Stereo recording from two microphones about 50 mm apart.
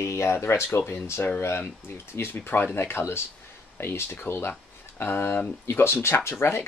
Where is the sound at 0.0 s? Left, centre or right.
Left.